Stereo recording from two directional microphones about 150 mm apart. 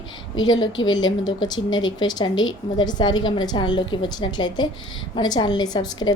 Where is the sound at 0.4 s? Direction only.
30° left (ahead or behind).